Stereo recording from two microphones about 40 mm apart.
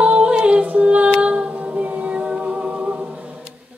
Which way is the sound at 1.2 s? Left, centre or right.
Right.